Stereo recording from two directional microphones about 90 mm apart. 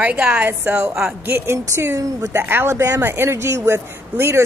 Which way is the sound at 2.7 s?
35° right (ahead or behind).